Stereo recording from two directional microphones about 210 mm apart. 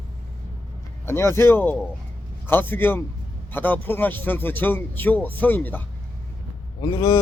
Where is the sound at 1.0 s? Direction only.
10° left (ahead or behind).